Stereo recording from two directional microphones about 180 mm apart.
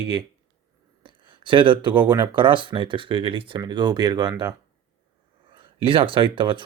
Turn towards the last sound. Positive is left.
turn(degrees=-25)  # may be behind; listen again after turning